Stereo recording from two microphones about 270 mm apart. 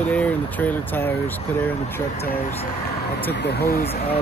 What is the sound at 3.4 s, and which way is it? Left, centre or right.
Speech, left.